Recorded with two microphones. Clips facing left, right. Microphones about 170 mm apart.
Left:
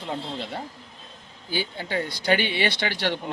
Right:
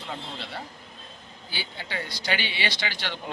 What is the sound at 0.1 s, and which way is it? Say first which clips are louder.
Speech: left 6 dB; 50° left (ahead or behind).